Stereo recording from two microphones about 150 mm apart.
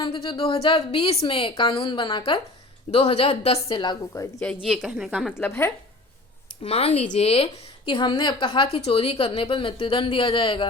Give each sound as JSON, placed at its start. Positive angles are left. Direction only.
{"t": 0.0, "sound": "a woman's voice", "side_deg": 30}
{"t": 4.4, "sound": "speech", "side_deg": 10}
{"t": 4.7, "sound": "a woman's voice", "side_deg": -5}
{"t": 5.4, "sound": "speech", "side_deg": 15}
{"t": 6.6, "sound": "a woman's voice", "side_deg": 40}